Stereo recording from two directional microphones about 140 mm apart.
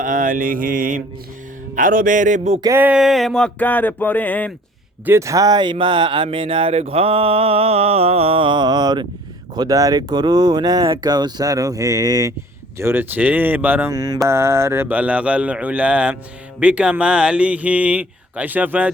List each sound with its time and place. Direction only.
0.0 s mantra: 75° right (ahead or behind); by 2.6 s 55° right (ahead or behind)
2.6 s a sound: 15° right (ahead or behind); by 4.5 s 10° left (ahead or behind)
5.0 s speech: 20° right (ahead or behind)
5.7 s mantra: 35° right (ahead or behind)
9.6 s speech: 25° right (ahead or behind)
13.9 s speech: 25° right (ahead or behind)